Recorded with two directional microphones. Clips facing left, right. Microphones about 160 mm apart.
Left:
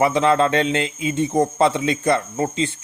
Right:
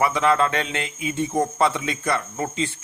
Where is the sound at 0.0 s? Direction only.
25° left (ahead or behind).